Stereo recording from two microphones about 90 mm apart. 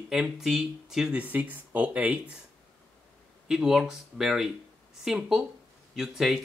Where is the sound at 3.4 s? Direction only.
5° right (ahead or behind).